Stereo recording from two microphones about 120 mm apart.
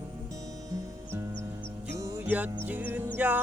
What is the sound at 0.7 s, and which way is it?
Music, 20° right (ahead or behind).